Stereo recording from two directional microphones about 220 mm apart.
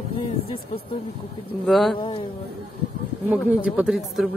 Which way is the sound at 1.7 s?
Centre (ahead or behind).